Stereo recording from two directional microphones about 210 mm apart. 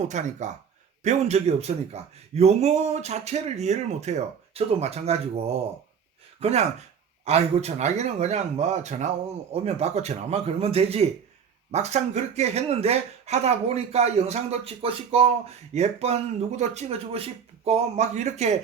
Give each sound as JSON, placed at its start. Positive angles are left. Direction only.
{"t": 0.1, "sound": "speech", "side_deg": -35}